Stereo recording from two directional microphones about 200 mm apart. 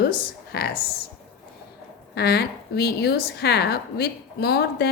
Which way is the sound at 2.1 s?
55° left (ahead or behind).